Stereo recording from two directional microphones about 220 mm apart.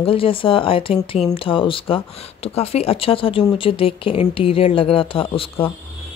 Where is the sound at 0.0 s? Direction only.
25° left (ahead or behind).